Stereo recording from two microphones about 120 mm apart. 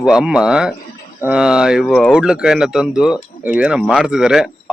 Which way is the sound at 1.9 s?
10° left (ahead or behind).